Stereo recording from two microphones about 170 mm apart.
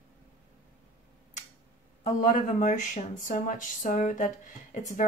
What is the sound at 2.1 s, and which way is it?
Speech, 50° left (ahead or behind).